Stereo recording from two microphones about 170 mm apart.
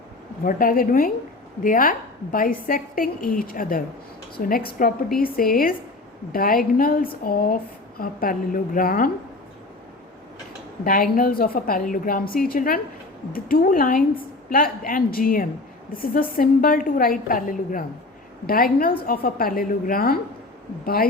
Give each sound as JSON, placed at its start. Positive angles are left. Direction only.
{"t": 0.4, "sound": "speech", "side_deg": 55}
{"t": 10.8, "sound": "speech", "side_deg": 55}